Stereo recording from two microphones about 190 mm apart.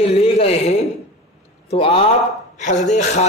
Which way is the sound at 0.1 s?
30° left (ahead or behind).